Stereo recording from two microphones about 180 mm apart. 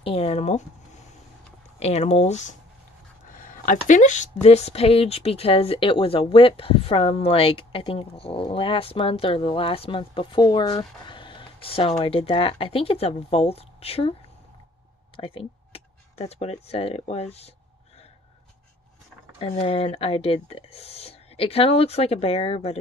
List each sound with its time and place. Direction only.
0.0 s speech: 35° left (ahead or behind)
15.1 s a sound: 30° left (ahead or behind)
16.6 s speech: 35° left (ahead or behind)
19.4 s speech: 30° left (ahead or behind)